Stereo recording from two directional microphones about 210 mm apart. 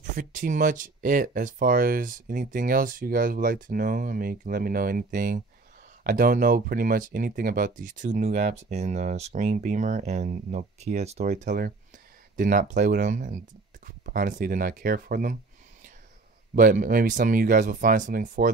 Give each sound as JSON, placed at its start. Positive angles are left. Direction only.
{"t": 0.1, "sound": "speech", "side_deg": -40}
{"t": 16.5, "sound": "speech", "side_deg": -40}